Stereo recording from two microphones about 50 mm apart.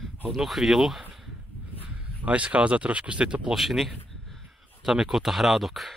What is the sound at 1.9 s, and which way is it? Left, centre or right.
Speech, right.